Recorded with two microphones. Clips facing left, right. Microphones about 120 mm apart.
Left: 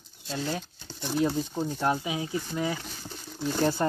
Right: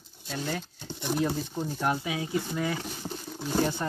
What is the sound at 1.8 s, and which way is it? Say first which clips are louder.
Speech: left 1 dB; 20° left (ahead or behind).